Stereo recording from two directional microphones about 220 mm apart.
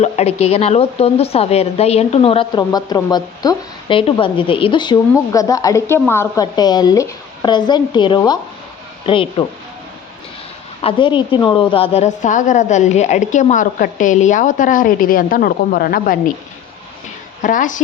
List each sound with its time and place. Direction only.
0.0 s speech: 30° left (ahead or behind)
10.8 s a woman's voice: 25° left (ahead or behind); by 16.3 s 40° left (ahead or behind)
17.4 s a woman's voice: 35° left (ahead or behind)